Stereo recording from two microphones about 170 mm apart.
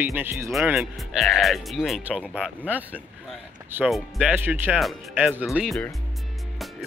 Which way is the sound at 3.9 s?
5° right (ahead or behind).